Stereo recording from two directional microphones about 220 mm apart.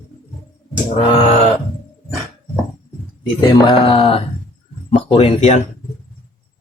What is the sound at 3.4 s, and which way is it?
Speech, 25° left (ahead or behind).